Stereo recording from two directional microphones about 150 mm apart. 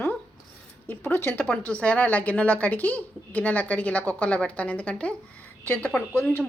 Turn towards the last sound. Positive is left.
turn(degrees=10)  # may be behind; listen again after turning